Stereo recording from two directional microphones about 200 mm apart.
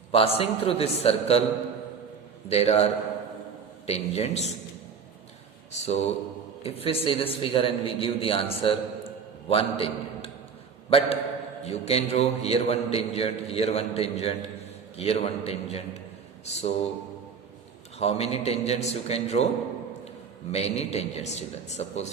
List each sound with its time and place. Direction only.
0.1 s a man's voice: 30° left (ahead or behind)
2.5 s a man's voice: 30° left (ahead or behind)
5.7 s a man's voice: 35° left (ahead or behind)
18.0 s a man's voice: 30° left (ahead or behind)
20.5 s a man's voice: 30° left (ahead or behind)